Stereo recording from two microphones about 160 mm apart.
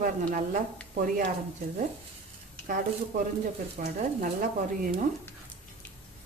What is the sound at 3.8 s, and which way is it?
Speech, 60° right (ahead or behind).